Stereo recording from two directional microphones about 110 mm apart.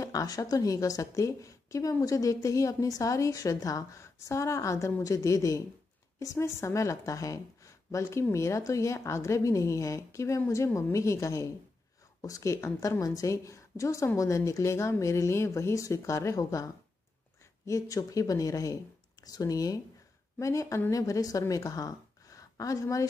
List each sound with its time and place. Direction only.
0.0 s a woman's voice: 30° left (ahead or behind)